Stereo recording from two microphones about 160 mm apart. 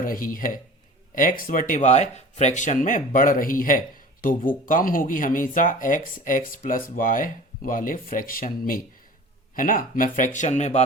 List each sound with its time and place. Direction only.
0.0 s speech: 60° left (ahead or behind)